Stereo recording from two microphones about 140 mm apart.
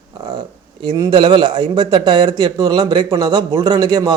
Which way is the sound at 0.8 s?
35° right (ahead or behind).